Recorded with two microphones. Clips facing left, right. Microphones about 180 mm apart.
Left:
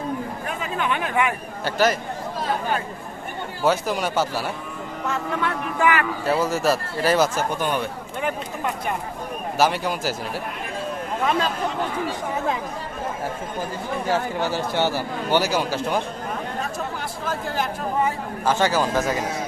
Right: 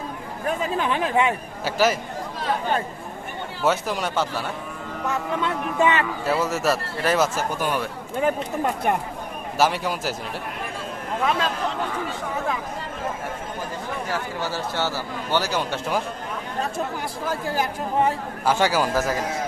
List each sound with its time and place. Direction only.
0.4 s speech: 35° right (ahead or behind)
1.6 s speech: 5° right (ahead or behind)
3.6 s speech: centre (ahead or behind)
5.0 s speech: 15° right (ahead or behind)
6.2 s speech: centre (ahead or behind)
9.6 s speech: centre (ahead or behind)
11.3 s speech: centre (ahead or behind)
14.1 s a man's voice: 20° left (ahead or behind); by 16.0 s centre (ahead or behind)
17.2 s speech: 10° right (ahead or behind)